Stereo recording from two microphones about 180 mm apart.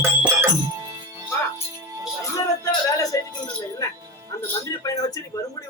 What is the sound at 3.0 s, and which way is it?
Jingle bell, 20° left (ahead or behind).